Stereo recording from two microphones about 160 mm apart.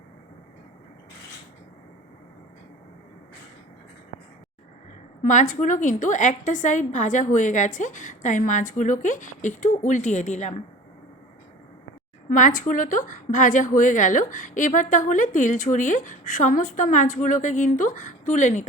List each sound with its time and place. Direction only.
5.2 s a woman's voice: 55° left (ahead or behind)
12.3 s a woman's voice: 55° left (ahead or behind)